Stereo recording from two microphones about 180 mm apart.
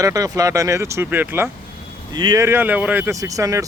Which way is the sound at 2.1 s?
25° right (ahead or behind).